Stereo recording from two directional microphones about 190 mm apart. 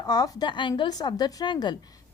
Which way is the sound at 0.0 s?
20° left (ahead or behind).